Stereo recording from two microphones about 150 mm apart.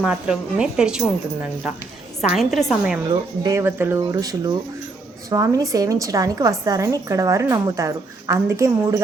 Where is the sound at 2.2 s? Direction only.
Centre (ahead or behind).